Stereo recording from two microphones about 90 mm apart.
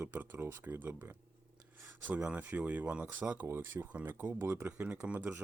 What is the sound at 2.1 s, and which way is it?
Speech, 15° right (ahead or behind).